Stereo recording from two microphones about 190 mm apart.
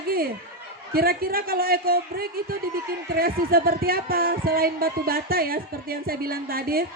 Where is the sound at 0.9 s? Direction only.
50° right (ahead or behind).